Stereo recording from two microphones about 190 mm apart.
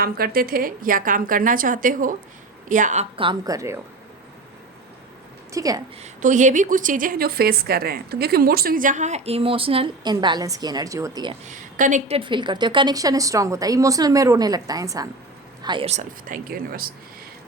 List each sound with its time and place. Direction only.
0.0 s a woman's voice: 50° right (ahead or behind); by 3.8 s 15° right (ahead or behind)
5.5 s a woman's voice: 20° right (ahead or behind)
6.0 s a woman's voice: 40° right (ahead or behind); by 11.3 s 20° right (ahead or behind)
11.4 s a woman's voice: 40° right (ahead or behind); by 15.9 s 25° right (ahead or behind)
15.9 s a woman's voice: 40° right (ahead or behind)